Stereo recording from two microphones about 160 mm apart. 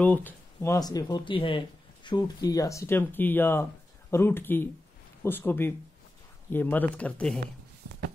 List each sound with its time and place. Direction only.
0.0 s speech: 10° left (ahead or behind)